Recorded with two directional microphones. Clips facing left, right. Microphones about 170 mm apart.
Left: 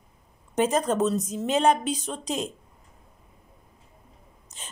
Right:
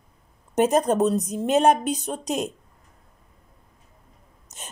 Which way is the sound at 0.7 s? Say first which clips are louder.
Right 4 dB; 60° right (ahead or behind).